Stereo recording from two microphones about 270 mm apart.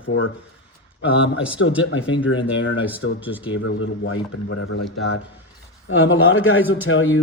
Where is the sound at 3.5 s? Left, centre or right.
Left.